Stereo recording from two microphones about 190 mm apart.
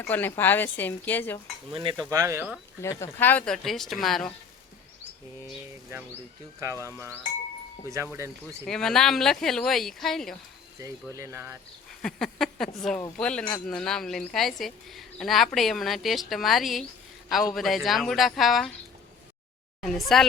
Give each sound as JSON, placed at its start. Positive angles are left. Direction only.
{"t": 0.0, "sound": "speech", "side_deg": 10}
{"t": 1.7, "sound": "stir", "side_deg": -25}
{"t": 2.0, "sound": "speech", "side_deg": -15}
{"t": 3.0, "sound": "a woman's voice", "side_deg": 10}
{"t": 6.6, "sound": "speech", "side_deg": -15}
{"t": 8.6, "sound": "a woman's voice", "side_deg": 0}
{"t": 11.1, "sound": "speech", "side_deg": -15}
{"t": 12.0, "sound": "a woman's voice", "side_deg": 0}
{"t": 19.8, "sound": "a woman's voice", "side_deg": 0}